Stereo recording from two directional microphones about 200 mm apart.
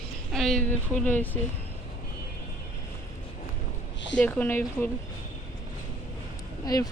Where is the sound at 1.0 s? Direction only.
10° left (ahead or behind).